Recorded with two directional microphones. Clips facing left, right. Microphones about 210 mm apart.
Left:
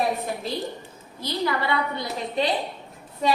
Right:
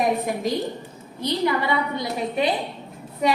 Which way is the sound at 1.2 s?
15° right (ahead or behind).